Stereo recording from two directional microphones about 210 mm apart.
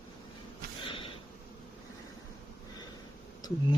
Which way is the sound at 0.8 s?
25° left (ahead or behind).